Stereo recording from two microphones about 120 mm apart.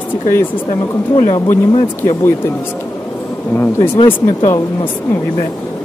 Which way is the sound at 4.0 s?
50° left (ahead or behind).